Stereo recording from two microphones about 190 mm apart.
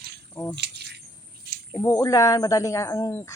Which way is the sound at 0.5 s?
60° right (ahead or behind).